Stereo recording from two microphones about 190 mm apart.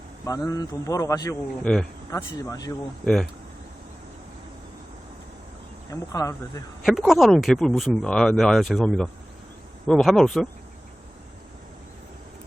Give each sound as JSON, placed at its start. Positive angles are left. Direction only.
{"t": 0.3, "sound": "a man's voice", "side_deg": 20}
{"t": 1.6, "sound": "speech", "side_deg": 5}
{"t": 2.0, "sound": "a man's voice", "side_deg": 15}
{"t": 5.9, "sound": "a man's voice", "side_deg": 15}
{"t": 6.8, "sound": "speech", "side_deg": 0}